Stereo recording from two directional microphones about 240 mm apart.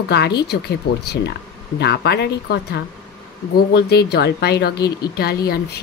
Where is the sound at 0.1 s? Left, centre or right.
Left.